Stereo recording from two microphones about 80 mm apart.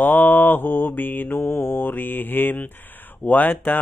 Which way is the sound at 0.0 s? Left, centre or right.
Left.